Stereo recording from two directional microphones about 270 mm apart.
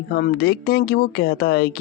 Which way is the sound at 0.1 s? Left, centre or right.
Left.